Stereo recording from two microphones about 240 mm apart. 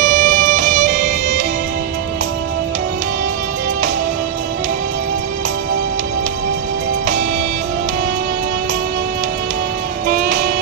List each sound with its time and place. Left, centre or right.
0.0 s music: right